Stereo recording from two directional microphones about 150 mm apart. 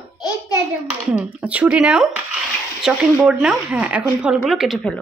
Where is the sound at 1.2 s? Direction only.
10° right (ahead or behind).